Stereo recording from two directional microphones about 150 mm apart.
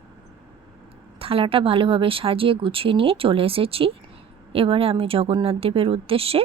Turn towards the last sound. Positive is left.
turn(degrees=-40)  # may be behind; listen again after turning